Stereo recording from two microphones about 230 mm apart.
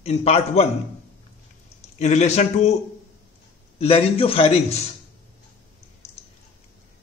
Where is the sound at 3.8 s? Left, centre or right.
Left.